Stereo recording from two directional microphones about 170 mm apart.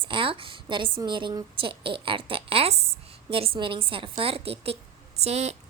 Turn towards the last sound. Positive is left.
turn(degrees=-40)  # may be behind; listen again after turning